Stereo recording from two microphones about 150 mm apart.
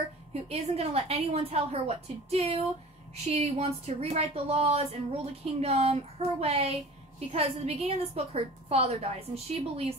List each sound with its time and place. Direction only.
0.3 s speech: 45° right (ahead or behind)